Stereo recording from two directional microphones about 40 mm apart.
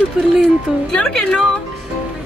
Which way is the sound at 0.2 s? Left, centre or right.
Centre.